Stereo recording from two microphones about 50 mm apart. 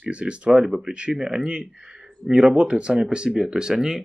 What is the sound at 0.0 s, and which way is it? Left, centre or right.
Speech, right.